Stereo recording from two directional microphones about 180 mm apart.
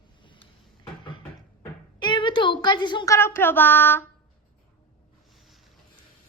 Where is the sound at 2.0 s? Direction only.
25° left (ahead or behind).